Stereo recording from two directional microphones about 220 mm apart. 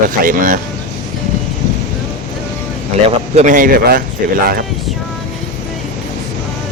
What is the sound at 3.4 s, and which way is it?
Speech, 35° right (ahead or behind).